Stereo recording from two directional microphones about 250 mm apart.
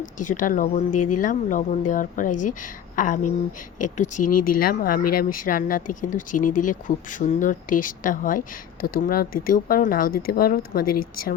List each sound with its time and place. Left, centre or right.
0.3 s speech: left
0.9 s speech: left
1.1 s speech: left